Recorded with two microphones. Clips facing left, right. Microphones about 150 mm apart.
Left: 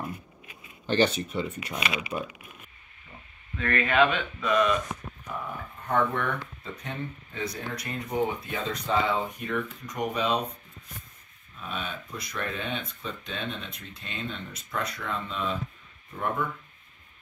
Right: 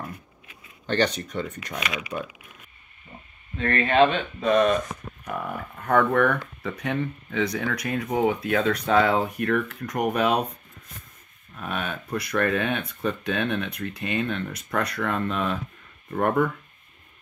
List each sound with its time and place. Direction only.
0.8 s speech: 10° left (ahead or behind)
3.5 s speech: 30° right (ahead or behind)
5.2 s speech: 65° right (ahead or behind)
11.5 s speech: 65° right (ahead or behind)